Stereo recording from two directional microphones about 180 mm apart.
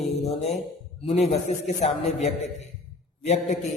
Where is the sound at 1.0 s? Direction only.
35° left (ahead or behind).